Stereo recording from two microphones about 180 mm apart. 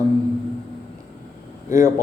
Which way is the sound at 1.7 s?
15° right (ahead or behind).